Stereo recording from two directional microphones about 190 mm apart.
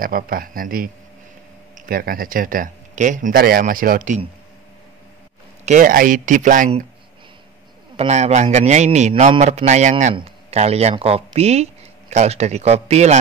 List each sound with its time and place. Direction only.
0.0 s speech: 50° right (ahead or behind)
5.7 s speech: 45° right (ahead or behind)
7.9 s a man's voice: 35° right (ahead or behind)